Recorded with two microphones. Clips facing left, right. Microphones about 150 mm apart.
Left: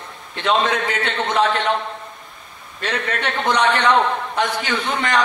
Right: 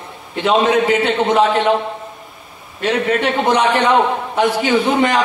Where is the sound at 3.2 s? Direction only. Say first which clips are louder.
Right 4 dB; 10° right (ahead or behind).